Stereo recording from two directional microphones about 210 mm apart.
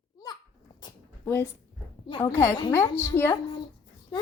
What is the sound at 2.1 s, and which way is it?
A woman's voice, 15° left (ahead or behind).